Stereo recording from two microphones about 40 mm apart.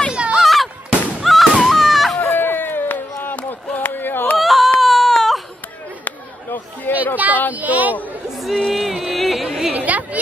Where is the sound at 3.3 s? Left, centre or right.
Left.